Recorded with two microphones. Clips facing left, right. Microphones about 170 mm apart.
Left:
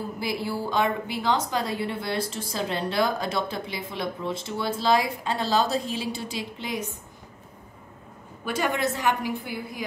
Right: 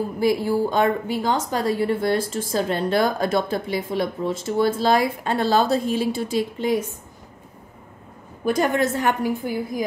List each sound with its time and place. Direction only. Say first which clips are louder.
0.2 s a woman's voice: right 10 dB; 45° right (ahead or behind)
8.5 s a woman's voice: right 6 dB; 45° right (ahead or behind)